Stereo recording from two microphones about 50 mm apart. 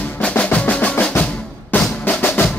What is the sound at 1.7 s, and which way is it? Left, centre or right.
Drum, left.